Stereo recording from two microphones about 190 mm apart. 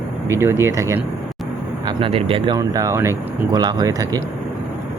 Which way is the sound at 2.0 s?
30° right (ahead or behind).